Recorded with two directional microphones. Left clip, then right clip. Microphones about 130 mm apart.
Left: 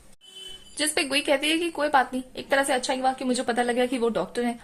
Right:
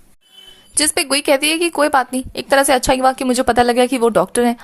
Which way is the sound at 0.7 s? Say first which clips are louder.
Right 8 dB; 50° right (ahead or behind).